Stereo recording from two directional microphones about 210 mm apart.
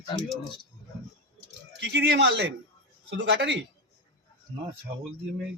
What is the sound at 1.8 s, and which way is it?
Speech, 55° right (ahead or behind).